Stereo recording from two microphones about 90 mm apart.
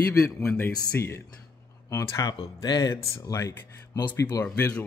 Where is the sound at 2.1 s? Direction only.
45° left (ahead or behind).